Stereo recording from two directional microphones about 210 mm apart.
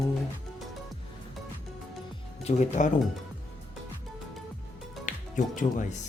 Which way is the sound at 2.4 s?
30° left (ahead or behind).